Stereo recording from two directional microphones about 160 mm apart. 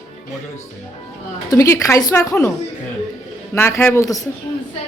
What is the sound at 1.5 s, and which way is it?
Speech, 20° left (ahead or behind).